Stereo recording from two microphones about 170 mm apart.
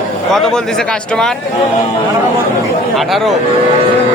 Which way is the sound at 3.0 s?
Centre (ahead or behind).